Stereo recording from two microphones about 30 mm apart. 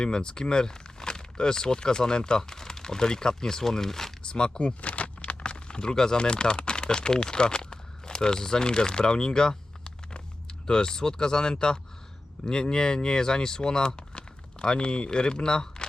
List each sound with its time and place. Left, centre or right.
0.0 s speech: left
4.3 s speech: left
4.8 s a sound: left
10.7 s speech: left